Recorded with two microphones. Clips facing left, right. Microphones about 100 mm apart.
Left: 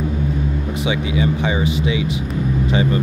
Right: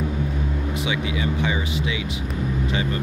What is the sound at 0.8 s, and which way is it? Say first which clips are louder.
Speech: left 7 dB; 25° left (ahead or behind).